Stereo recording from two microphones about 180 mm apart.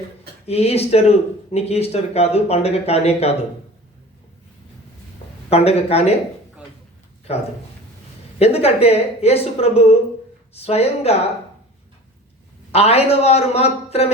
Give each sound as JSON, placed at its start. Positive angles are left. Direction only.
{"t": 0.4, "sound": "speech", "side_deg": 35}
{"t": 5.5, "sound": "speech", "side_deg": 35}
{"t": 7.3, "sound": "speech", "side_deg": 35}
{"t": 12.7, "sound": "speech", "side_deg": 35}